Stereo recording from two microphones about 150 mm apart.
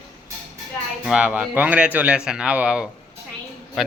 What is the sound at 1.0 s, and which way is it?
A man's voice, 5° right (ahead or behind).